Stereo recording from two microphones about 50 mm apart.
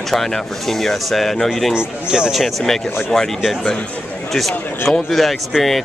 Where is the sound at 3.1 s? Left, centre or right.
Centre.